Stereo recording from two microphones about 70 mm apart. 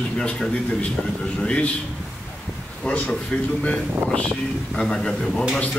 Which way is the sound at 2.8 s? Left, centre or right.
Centre.